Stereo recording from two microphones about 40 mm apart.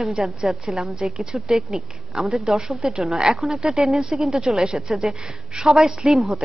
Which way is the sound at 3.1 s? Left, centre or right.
Centre.